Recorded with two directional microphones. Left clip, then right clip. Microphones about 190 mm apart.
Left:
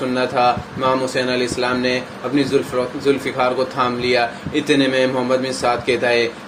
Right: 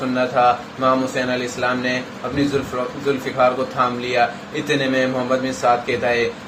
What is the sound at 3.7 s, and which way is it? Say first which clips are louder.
A man's voice: left 1 dB; 45° left (ahead or behind).